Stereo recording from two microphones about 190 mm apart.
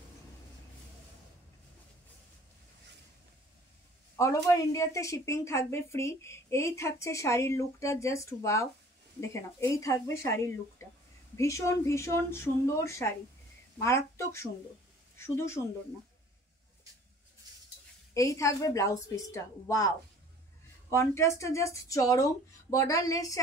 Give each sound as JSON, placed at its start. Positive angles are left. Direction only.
{"t": 4.2, "sound": "a woman's voice", "side_deg": 15}
{"t": 18.1, "sound": "a woman's voice", "side_deg": 15}
{"t": 20.9, "sound": "a woman's voice", "side_deg": 15}